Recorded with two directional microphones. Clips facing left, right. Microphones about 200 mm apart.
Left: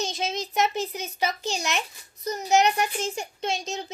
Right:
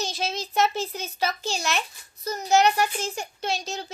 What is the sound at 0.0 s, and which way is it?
A child's voice, 20° left (ahead or behind).